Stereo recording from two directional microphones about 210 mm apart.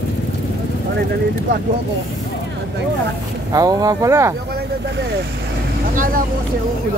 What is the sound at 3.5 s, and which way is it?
Speech, 15° right (ahead or behind).